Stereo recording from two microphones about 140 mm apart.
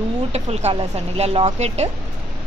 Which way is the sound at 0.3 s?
50° right (ahead or behind).